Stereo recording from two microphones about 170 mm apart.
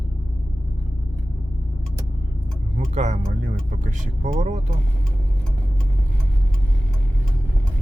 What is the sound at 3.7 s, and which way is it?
Speech, 45° right (ahead or behind).